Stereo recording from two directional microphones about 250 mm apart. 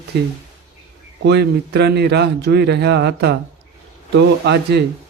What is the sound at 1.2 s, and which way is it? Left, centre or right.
A man's voice, right.